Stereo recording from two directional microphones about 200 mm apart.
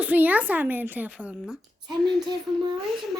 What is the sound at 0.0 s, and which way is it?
A woman's voice, 10° right (ahead or behind).